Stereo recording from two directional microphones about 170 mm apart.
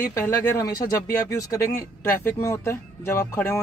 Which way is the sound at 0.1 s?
15° left (ahead or behind).